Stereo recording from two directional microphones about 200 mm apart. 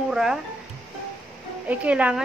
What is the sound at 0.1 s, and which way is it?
Speech, 5° right (ahead or behind).